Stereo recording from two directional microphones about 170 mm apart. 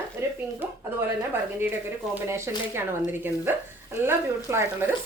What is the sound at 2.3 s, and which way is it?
A woman's voice, 15° right (ahead or behind).